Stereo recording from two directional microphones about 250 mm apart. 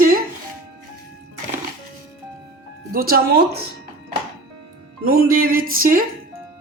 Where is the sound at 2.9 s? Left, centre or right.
Right.